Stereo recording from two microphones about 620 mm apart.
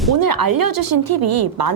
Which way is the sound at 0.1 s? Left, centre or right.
Right.